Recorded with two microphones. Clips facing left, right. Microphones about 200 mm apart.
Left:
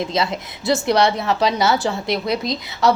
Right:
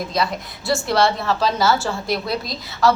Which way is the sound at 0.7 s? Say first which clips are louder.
Left 2 dB; 20° left (ahead or behind).